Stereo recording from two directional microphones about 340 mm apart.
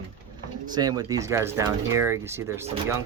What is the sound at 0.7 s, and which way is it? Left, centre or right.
Speech, centre.